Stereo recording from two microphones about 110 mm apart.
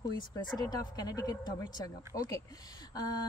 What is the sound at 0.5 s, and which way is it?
Speech, 35° left (ahead or behind).